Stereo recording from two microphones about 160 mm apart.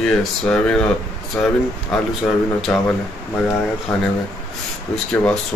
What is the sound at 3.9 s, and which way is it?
Speech, 5° left (ahead or behind).